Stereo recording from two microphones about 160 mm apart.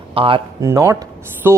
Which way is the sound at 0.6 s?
20° right (ahead or behind).